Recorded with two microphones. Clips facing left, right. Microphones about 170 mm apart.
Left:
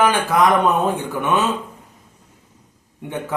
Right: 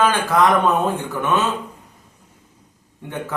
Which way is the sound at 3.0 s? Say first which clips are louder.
Left 4 dB; 15° left (ahead or behind).